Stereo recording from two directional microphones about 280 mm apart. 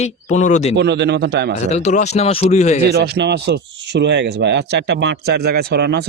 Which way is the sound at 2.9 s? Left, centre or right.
Right.